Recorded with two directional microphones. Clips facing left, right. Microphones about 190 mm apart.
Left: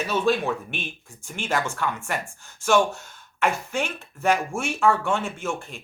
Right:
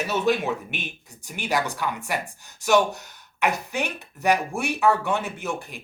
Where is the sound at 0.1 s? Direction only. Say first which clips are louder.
Left 1 dB; 20° right (ahead or behind).